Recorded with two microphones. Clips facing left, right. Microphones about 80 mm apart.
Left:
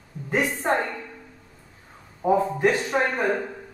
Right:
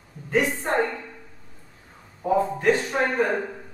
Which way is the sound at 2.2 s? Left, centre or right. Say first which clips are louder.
Even; centre.